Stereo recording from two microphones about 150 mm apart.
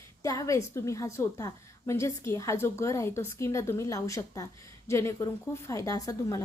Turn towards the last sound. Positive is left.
turn(degrees=20)  # may be behind; listen again after turning